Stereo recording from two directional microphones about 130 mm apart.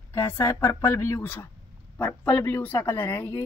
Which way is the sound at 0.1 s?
20° left (ahead or behind).